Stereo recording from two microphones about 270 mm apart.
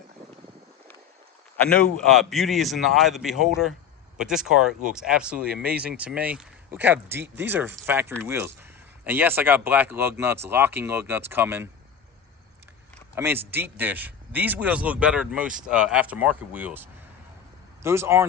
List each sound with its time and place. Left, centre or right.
1.7 s speech: centre
13.1 s speech: centre